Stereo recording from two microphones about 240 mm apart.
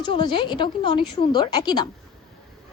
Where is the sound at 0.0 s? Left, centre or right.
Centre.